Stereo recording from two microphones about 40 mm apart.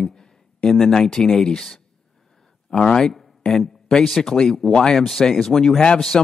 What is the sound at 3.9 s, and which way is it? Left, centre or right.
Speech, centre.